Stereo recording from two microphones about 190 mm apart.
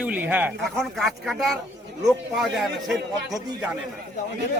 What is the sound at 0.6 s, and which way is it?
A man's voice, centre (ahead or behind).